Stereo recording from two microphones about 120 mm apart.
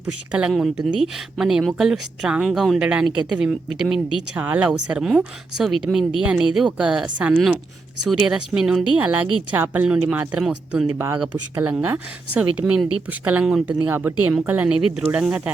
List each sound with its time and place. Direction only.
0.0 s a woman's voice: 10° right (ahead or behind)
13.8 s a woman's voice: 15° right (ahead or behind)